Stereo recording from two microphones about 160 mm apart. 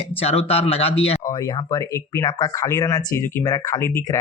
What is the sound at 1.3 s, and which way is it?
Speech, 25° left (ahead or behind).